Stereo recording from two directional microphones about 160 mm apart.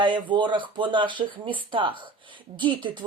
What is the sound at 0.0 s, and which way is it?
Speech, 30° right (ahead or behind).